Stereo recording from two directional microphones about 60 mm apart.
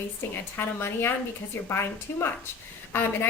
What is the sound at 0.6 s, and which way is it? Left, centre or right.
A woman's voice, left.